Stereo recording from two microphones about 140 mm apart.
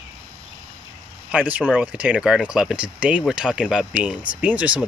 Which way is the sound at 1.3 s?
10° right (ahead or behind).